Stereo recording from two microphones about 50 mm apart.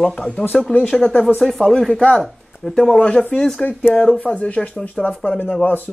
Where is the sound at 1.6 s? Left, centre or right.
Centre.